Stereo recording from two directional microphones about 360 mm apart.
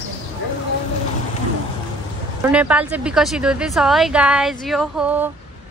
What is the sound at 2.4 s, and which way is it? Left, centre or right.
Speech, centre.